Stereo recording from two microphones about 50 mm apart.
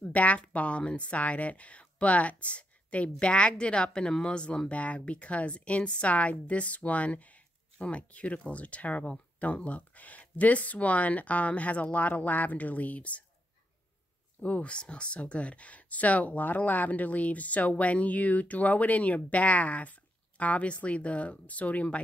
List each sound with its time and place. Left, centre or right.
0.0 s speech: left
14.4 s speech: left